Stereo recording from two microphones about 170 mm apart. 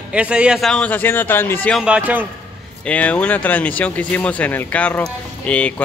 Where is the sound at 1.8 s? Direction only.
5° right (ahead or behind).